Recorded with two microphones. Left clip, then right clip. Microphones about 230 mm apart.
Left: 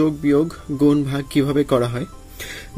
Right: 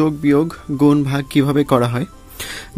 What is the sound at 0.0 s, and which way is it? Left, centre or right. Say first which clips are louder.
Speech: right 2 dB; right.